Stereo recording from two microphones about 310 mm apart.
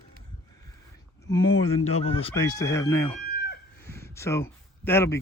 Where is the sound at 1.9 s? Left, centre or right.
Centre.